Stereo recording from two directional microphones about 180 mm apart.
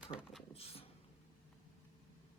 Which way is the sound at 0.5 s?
30° left (ahead or behind).